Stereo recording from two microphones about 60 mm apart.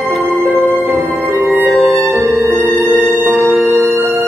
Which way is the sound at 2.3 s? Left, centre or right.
Right.